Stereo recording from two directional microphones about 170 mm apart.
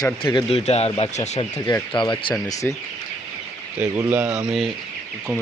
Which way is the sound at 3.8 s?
10° right (ahead or behind).